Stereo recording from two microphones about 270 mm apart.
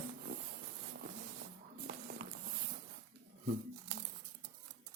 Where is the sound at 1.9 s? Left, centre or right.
Right.